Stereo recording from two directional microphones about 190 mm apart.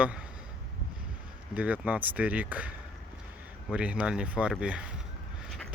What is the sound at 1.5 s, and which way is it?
Speech, 5° right (ahead or behind).